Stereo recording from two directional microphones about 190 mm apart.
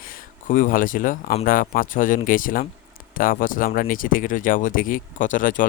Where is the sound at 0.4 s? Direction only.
45° left (ahead or behind).